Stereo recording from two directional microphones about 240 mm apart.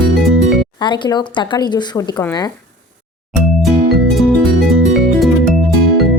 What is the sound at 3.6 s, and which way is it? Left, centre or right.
Music, centre.